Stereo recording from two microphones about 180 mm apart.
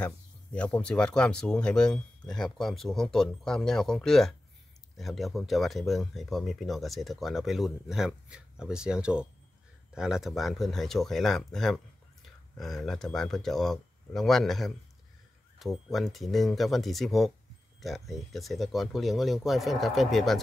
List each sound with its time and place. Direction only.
0.0 s speech: 5° left (ahead or behind)